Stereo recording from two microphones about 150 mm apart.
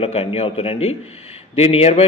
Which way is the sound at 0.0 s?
40° left (ahead or behind).